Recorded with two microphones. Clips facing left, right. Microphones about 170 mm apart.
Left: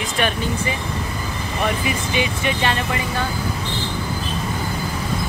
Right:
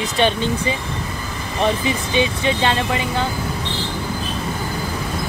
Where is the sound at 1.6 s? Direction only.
25° right (ahead or behind).